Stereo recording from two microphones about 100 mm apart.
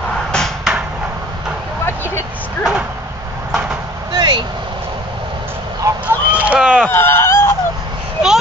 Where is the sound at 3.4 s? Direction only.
10° right (ahead or behind).